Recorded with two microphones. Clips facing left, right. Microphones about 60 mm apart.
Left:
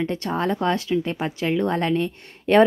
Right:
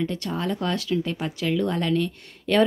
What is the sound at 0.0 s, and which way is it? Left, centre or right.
Speech, left.